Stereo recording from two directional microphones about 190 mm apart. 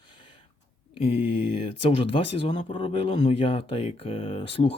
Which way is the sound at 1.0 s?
30° left (ahead or behind).